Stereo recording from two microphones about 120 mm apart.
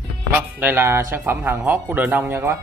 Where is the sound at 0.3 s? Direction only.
15° right (ahead or behind).